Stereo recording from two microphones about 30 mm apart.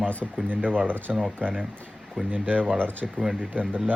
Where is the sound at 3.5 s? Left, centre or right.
Right.